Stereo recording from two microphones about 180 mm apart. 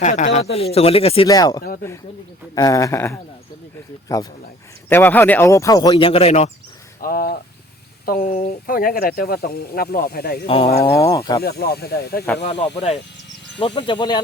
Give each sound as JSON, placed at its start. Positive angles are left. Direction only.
{"t": 0.0, "sound": "speech", "side_deg": 40}
{"t": 1.3, "sound": "speech", "side_deg": 20}
{"t": 5.9, "sound": "speech", "side_deg": 30}
{"t": 7.0, "sound": "speech", "side_deg": 55}
{"t": 10.4, "sound": "speech", "side_deg": 30}
{"t": 10.9, "sound": "speech", "side_deg": 15}
{"t": 11.4, "sound": "speech", "side_deg": 60}
{"t": 12.4, "sound": "speech", "side_deg": 35}